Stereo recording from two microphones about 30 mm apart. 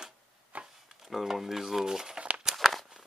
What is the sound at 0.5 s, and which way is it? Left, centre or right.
Chopping, right.